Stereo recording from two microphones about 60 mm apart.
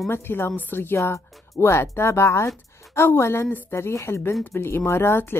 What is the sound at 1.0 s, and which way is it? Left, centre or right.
A woman's voice, left.